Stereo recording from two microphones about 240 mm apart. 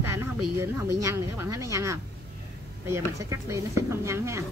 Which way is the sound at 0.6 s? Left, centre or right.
Centre.